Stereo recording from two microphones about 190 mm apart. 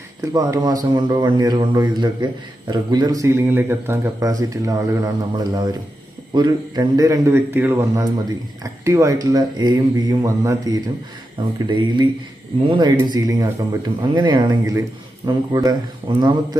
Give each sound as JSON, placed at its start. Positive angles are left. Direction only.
{"t": 0.2, "sound": "speech", "side_deg": -20}